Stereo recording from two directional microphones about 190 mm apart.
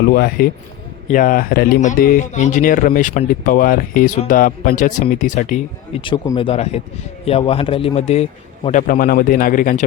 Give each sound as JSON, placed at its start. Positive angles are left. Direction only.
{"t": 0.1, "sound": "speech", "side_deg": 50}
{"t": 6.0, "sound": "a man's voice", "side_deg": 25}
{"t": 8.9, "sound": "speech", "side_deg": 50}